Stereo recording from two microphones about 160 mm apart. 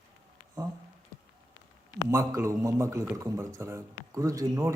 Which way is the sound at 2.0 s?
20° right (ahead or behind).